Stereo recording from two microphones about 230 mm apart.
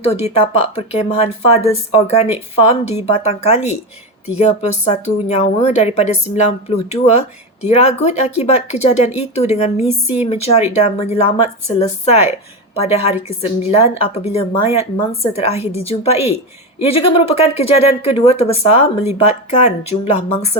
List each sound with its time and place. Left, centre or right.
0.0 s speech: left